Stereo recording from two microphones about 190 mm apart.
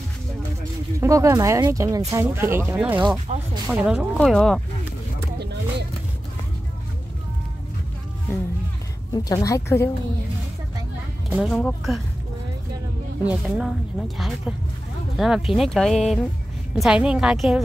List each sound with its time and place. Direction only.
0.9 s speech: 15° right (ahead or behind)
3.0 s speech: 25° right (ahead or behind)
3.7 s speech: 5° right (ahead or behind)
5.4 s a sound: 60° right (ahead or behind)
9.1 s speech: 15° left (ahead or behind)
11.2 s speech: centre (ahead or behind)
13.2 s speech: 5° right (ahead or behind)